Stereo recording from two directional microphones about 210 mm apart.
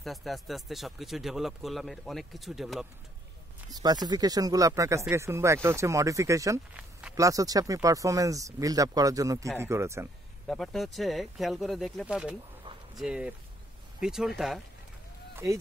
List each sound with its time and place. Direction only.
0.0 s speech: centre (ahead or behind)
3.7 s speech: 20° right (ahead or behind)
10.4 s speech: centre (ahead or behind)
15.3 s speech: 15° right (ahead or behind)